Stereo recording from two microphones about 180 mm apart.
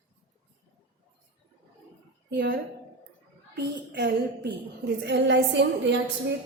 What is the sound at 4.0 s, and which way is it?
A woman's voice, 70° right (ahead or behind).